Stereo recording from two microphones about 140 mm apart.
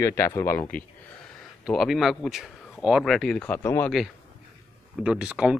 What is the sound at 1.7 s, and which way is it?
Speech, centre (ahead or behind).